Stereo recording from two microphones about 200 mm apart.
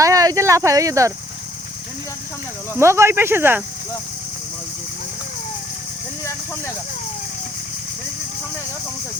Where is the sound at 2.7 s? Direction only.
15° right (ahead or behind).